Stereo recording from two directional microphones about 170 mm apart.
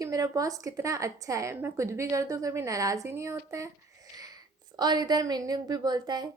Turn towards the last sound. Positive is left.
turn(degrees=-25)  # may be behind; listen again after turning